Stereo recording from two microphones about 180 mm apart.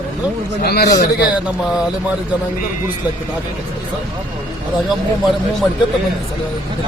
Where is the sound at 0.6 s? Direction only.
60° left (ahead or behind).